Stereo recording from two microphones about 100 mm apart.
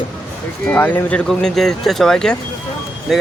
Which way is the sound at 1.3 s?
5° left (ahead or behind).